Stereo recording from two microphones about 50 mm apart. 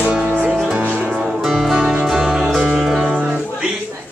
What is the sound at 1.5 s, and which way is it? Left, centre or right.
Music, centre.